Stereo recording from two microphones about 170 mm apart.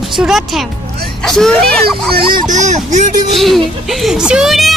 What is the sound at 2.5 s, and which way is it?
Speech, 45° right (ahead or behind).